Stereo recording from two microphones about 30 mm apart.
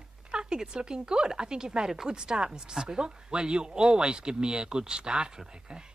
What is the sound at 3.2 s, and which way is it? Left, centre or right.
Speech, right.